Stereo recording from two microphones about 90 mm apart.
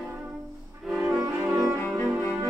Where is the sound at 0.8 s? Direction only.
Centre (ahead or behind).